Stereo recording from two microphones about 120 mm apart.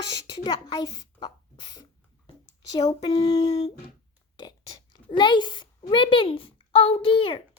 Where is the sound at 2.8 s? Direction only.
55° left (ahead or behind).